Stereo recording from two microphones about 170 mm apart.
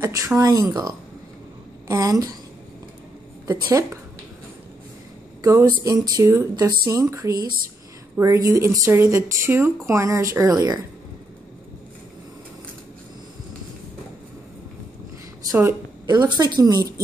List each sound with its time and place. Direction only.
0.0 s speech: 15° right (ahead or behind)
3.6 s speech: 20° right (ahead or behind)
5.4 s speech: 15° right (ahead or behind)
15.5 s a woman's voice: 20° right (ahead or behind)